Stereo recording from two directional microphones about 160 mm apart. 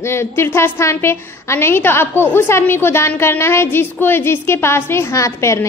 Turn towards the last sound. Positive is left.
turn(degrees=15)  # may be behind; listen again after turning